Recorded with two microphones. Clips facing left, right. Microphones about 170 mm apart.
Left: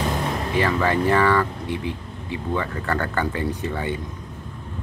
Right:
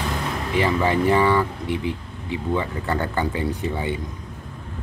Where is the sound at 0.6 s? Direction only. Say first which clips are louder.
Right 1 dB; 15° right (ahead or behind).